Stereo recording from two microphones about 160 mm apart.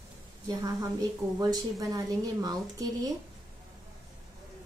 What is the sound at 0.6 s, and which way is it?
A woman's voice, 25° right (ahead or behind).